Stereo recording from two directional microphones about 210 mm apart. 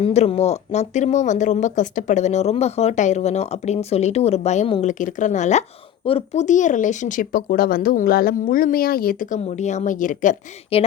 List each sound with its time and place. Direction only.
0.0 s speech: 30° left (ahead or behind)